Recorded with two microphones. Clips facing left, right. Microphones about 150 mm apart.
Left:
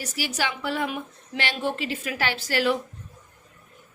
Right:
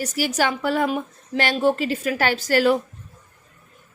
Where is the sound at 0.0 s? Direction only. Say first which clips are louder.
Right 7 dB; 45° right (ahead or behind).